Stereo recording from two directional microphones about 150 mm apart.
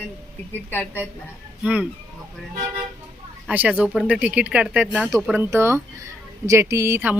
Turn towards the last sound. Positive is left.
turn(degrees=-15)  # may be behind; listen again after turning